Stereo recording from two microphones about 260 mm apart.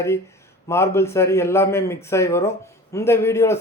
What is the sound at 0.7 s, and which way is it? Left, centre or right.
Speech, centre.